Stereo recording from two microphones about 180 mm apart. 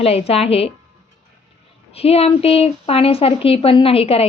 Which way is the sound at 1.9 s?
35° left (ahead or behind).